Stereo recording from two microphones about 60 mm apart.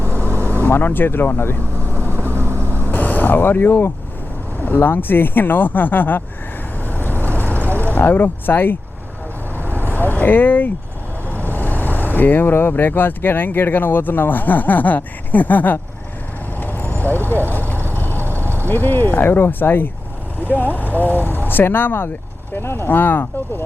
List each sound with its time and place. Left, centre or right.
0.0 s vehicle: right
0.6 s speech: left
1.8 s vehicle: right
2.9 s speech: left
6.8 s vehicle: left
7.8 s speech: left
9.6 s vehicle: left
11.3 s speech: left
16.6 s vehicle: left
17.3 s speech: left
17.9 s vehicle: left
18.2 s vehicle: right
18.7 s speech: left